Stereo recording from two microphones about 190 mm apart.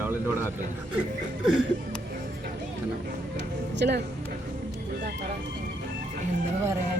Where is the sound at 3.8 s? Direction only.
65° right (ahead or behind).